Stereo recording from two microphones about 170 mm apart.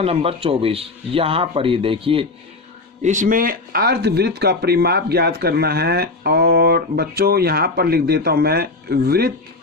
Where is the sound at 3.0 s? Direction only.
45° right (ahead or behind).